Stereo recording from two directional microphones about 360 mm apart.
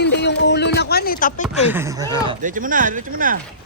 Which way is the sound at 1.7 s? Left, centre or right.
Centre.